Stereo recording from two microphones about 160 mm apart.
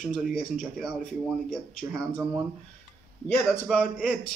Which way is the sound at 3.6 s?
10° left (ahead or behind).